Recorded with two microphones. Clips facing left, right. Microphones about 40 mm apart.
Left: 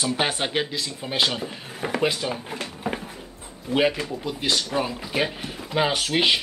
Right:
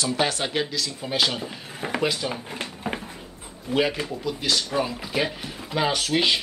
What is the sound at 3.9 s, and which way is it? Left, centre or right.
Speech, centre.